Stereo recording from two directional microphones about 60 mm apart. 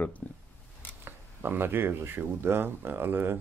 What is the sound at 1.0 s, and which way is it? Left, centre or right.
Speech, right.